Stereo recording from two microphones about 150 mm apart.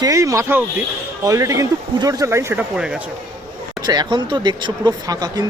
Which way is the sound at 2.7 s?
5° right (ahead or behind).